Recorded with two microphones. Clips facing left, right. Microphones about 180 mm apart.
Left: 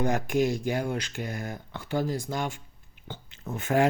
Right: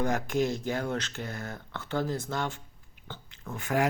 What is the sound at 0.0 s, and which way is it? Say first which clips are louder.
Speech: left 2 dB; 15° left (ahead or behind).